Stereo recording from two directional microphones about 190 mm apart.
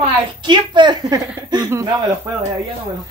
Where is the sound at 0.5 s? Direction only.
25° right (ahead or behind).